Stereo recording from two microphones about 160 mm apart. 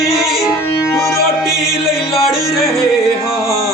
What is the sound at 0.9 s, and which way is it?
Music, 15° left (ahead or behind).